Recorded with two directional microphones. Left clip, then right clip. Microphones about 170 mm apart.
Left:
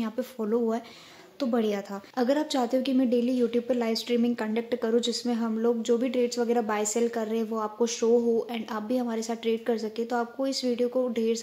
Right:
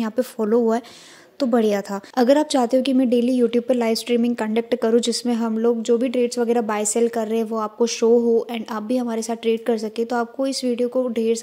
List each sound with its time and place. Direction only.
0.0 s a woman's voice: 45° right (ahead or behind)